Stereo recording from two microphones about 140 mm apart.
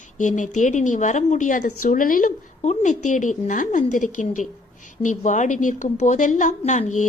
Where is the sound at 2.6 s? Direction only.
55° left (ahead or behind).